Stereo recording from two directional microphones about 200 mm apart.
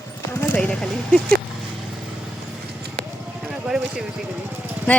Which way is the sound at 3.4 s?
5° right (ahead or behind).